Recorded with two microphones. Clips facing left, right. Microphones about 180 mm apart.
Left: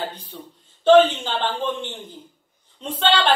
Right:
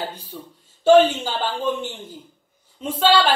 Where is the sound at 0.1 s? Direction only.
10° right (ahead or behind).